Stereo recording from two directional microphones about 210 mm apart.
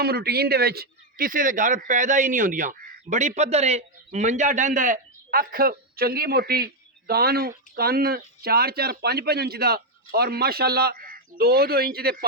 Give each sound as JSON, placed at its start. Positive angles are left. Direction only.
{"t": 0.0, "sound": "a man's voice", "side_deg": -50}